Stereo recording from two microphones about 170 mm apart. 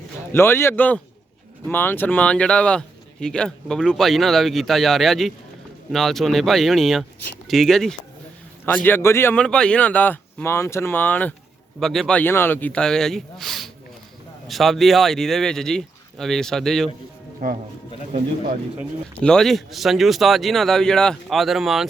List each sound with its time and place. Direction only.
0.3 s speech: 15° left (ahead or behind)
17.4 s speech: 55° right (ahead or behind)
19.2 s speech: 5° left (ahead or behind)